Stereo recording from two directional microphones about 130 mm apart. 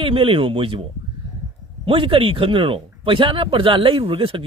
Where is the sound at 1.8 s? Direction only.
40° right (ahead or behind).